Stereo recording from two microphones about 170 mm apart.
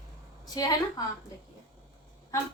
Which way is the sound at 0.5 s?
20° left (ahead or behind).